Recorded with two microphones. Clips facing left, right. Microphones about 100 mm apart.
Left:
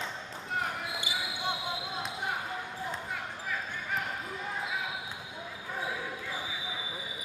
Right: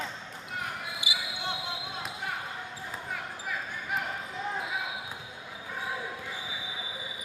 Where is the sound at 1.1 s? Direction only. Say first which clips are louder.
Right 2 dB; 10° right (ahead or behind).